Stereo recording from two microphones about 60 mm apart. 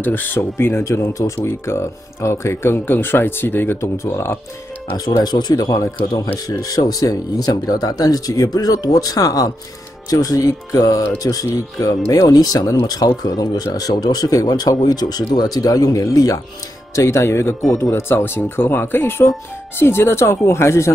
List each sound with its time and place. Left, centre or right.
0.0 s speech: left
0.8 s speech: left
3.8 s speech: left
5.5 s speech: left
10.0 s speech: left
16.9 s speech: left